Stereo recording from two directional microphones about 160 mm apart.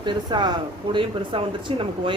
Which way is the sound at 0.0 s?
30° right (ahead or behind).